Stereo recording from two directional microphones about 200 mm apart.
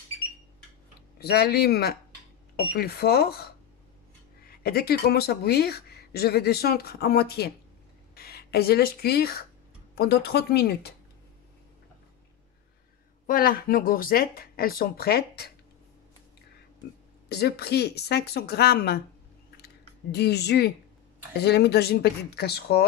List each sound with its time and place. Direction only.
1.2 s speech: 50° left (ahead or behind)
13.3 s speech: 45° left (ahead or behind)
17.3 s speech: 55° left (ahead or behind)
20.1 s a woman's voice: 55° left (ahead or behind)